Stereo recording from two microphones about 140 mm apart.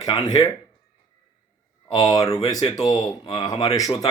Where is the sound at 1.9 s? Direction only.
25° left (ahead or behind).